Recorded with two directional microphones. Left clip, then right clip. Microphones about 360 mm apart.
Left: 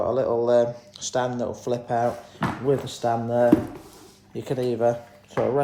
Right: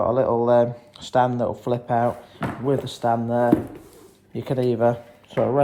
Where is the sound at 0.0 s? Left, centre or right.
Centre.